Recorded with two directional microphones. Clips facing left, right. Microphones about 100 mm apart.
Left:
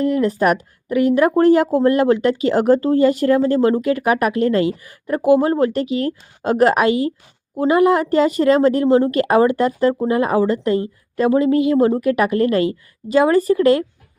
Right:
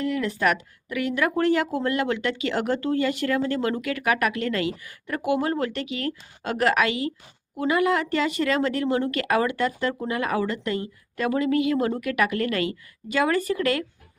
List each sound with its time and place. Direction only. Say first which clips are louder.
0.0 s speech: left 7 dB; 40° left (ahead or behind)